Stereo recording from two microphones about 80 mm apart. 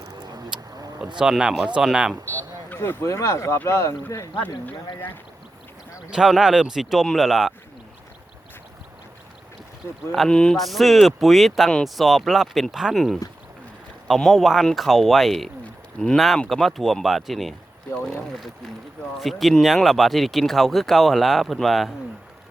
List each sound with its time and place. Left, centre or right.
0.2 s a sound: right
1.2 s speech: centre
2.2 s speech: left
3.1 s speech: left
6.1 s speech: centre
10.2 s speech: centre
14.2 s speech: centre